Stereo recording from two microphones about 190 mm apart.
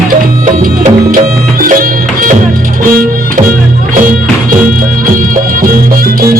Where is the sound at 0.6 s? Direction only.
45° right (ahead or behind).